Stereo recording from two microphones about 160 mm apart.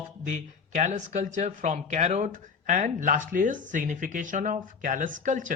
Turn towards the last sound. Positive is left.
turn(degrees=-50)  # may be behind; listen again after turning